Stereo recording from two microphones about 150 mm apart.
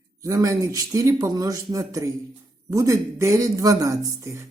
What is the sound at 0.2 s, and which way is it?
Speech, 20° right (ahead or behind).